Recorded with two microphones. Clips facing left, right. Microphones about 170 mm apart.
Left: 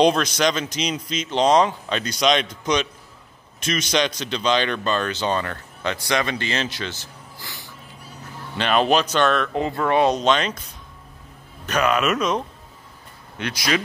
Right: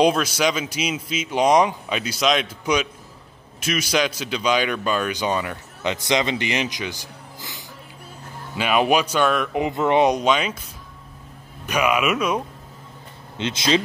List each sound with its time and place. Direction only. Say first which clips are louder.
0.0 s speech: left 1 dB; 5° right (ahead or behind)
11.6 s speech: even; 10° right (ahead or behind)
13.4 s speech: right 3 dB; 25° right (ahead or behind)